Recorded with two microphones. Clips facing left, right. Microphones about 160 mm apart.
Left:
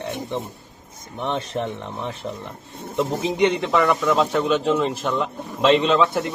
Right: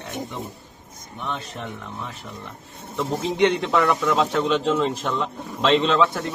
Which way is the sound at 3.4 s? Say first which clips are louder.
Even; centre (ahead or behind).